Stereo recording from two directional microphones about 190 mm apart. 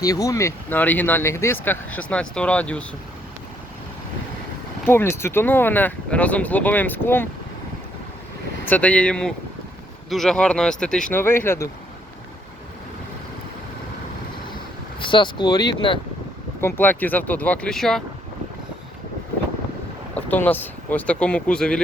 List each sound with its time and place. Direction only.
0.0 s speech: 20° left (ahead or behind)
4.9 s speech: 10° left (ahead or behind)
8.6 s speech: 10° left (ahead or behind)
14.9 s speech: 25° left (ahead or behind)
16.6 s speech: 10° left (ahead or behind)
20.1 s speech: 10° left (ahead or behind)